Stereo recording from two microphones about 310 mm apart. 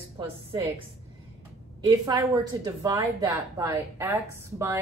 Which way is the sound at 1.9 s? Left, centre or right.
Centre.